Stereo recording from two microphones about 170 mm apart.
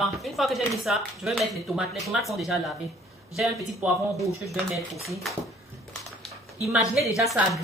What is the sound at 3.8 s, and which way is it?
Speech, 5° right (ahead or behind).